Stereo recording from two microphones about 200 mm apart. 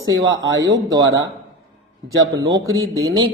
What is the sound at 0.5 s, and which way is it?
Speech, 65° right (ahead or behind).